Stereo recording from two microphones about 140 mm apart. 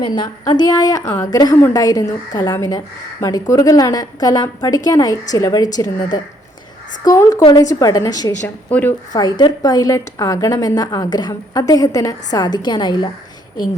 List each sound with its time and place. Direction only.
0.2 s a woman's voice: 30° left (ahead or behind)
8.7 s a woman's voice: 15° left (ahead or behind)
9.1 s a woman's voice: 30° left (ahead or behind)